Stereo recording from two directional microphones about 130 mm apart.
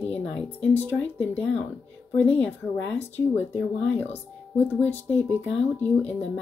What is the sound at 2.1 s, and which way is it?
Speech, 10° left (ahead or behind).